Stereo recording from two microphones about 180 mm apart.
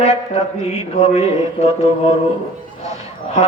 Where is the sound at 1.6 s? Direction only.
35° left (ahead or behind).